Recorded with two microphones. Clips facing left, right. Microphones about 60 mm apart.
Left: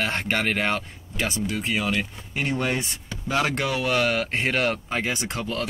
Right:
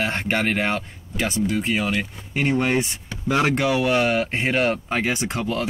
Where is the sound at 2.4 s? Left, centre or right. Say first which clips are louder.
Right 5 dB; right.